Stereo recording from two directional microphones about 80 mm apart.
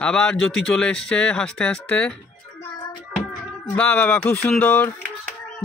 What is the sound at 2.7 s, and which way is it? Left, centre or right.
Hands, left.